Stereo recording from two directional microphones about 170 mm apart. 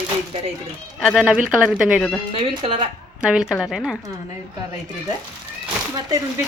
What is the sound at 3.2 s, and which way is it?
Speech, 5° right (ahead or behind).